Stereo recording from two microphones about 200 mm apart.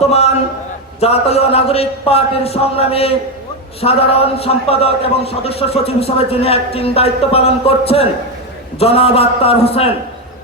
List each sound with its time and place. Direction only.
0.0 s a man's voice: 30° left (ahead or behind)